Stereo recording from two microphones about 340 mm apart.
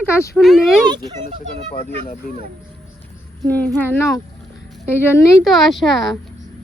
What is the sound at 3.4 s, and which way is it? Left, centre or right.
Speech, centre.